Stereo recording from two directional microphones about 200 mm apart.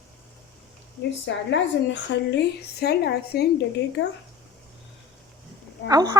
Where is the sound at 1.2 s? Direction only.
65° left (ahead or behind).